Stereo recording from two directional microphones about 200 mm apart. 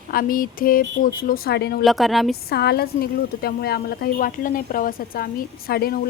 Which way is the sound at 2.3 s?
55° left (ahead or behind).